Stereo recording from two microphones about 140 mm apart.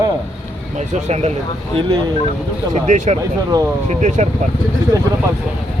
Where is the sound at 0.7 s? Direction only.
55° right (ahead or behind).